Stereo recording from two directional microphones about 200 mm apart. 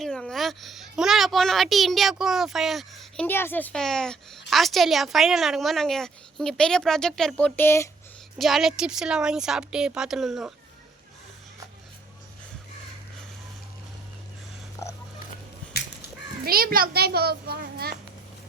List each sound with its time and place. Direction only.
0.0 s a child's voice: centre (ahead or behind)
8.4 s a child's voice: centre (ahead or behind)
14.8 s a sound: 15° left (ahead or behind)
16.5 s a child's voice: 45° right (ahead or behind)